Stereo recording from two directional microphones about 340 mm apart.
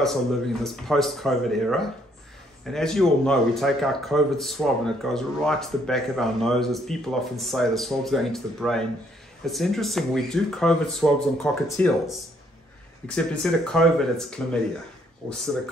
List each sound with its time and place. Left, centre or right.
0.0 s speech: centre